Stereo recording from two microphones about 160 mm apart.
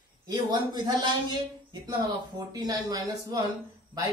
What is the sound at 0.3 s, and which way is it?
Speech, 25° right (ahead or behind).